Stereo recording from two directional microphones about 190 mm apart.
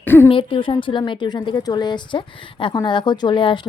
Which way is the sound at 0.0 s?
10° left (ahead or behind).